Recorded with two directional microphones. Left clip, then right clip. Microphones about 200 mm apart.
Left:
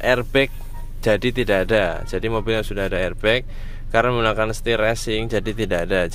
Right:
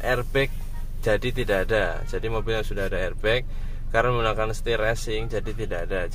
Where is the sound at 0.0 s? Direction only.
45° left (ahead or behind).